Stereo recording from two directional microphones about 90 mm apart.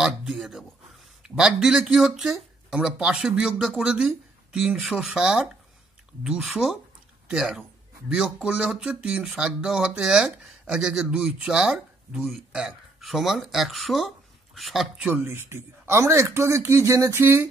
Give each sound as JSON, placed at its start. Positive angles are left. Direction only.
{"t": 0.0, "sound": "speech", "side_deg": -5}
{"t": 15.2, "sound": "speech", "side_deg": -25}